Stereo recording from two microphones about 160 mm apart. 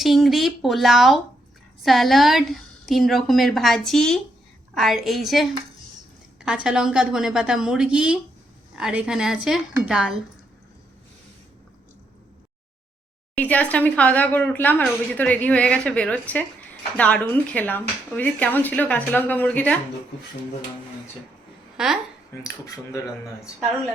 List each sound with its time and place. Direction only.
0.0 s a woman's voice: centre (ahead or behind)
13.3 s speech: 10° left (ahead or behind)
21.8 s a woman's voice: 5° right (ahead or behind)
22.4 s speech: 20° left (ahead or behind)